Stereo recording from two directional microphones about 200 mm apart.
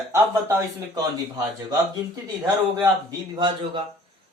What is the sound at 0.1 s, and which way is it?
Speech, 15° right (ahead or behind).